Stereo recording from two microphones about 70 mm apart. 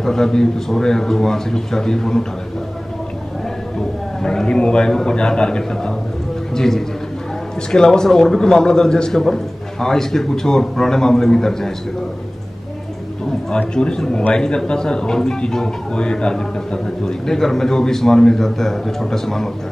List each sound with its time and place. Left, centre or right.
0.0 s speech: centre
4.2 s a man's voice: centre
13.5 s speech: centre